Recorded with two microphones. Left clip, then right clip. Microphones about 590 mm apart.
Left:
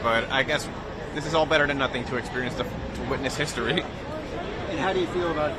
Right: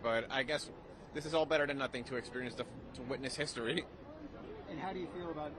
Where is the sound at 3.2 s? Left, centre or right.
Right.